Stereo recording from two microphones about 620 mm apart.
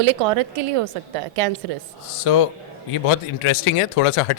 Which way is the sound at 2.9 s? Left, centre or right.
Left.